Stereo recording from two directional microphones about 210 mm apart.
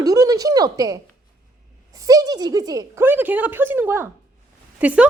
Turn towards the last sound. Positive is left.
turn(degrees=-5)  # may be behind; listen again after turning